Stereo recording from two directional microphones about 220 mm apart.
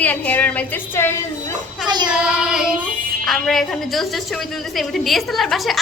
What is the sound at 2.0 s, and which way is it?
A woman's voice, 5° right (ahead or behind).